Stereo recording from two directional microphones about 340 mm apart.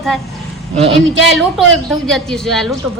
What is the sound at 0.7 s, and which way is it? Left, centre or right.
Speech, centre.